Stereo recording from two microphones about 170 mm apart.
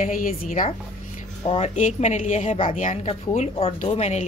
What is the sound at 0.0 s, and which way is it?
A woman's voice, 50° left (ahead or behind).